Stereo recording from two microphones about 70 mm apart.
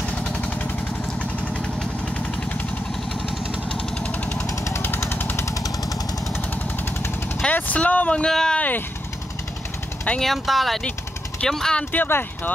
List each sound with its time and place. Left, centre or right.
0.2 s vehicle: centre
4.0 s jackhammer: centre
4.5 s jackhammer: left
4.8 s jackhammer: left
5.4 s jackhammer: left
7.4 s a sound: left
8.3 s speech: centre
8.5 s vehicle: left
10.2 s speech: centre
11.9 s speech: left